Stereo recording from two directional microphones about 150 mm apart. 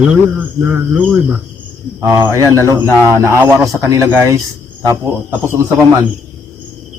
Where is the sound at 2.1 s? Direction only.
20° right (ahead or behind).